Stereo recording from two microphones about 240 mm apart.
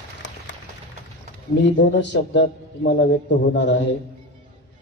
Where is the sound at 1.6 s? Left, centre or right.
Left.